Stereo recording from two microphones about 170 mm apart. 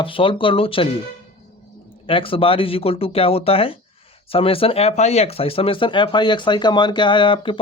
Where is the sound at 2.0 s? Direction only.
30° left (ahead or behind).